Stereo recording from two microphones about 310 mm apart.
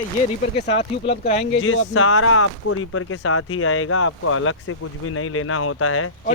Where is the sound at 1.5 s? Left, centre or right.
Left.